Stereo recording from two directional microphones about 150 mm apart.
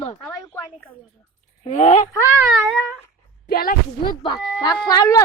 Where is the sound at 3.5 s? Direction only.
70° left (ahead or behind).